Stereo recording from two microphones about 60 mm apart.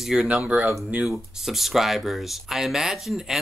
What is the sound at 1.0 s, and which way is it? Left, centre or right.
Speech, centre.